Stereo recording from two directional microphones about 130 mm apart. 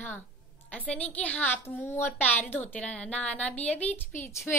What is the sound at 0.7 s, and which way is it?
A woman's voice, 10° left (ahead or behind).